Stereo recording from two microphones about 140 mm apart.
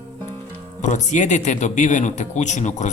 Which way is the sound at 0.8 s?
60° left (ahead or behind).